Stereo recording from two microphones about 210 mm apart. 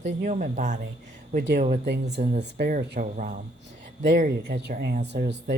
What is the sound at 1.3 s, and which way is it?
Speech, 55° right (ahead or behind).